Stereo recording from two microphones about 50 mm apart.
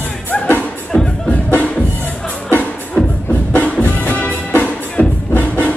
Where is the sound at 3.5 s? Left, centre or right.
Left.